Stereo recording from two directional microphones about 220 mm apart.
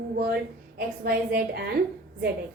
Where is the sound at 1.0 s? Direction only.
45° right (ahead or behind).